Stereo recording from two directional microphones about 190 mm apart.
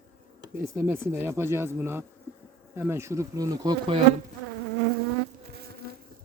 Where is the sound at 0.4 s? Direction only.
15° right (ahead or behind).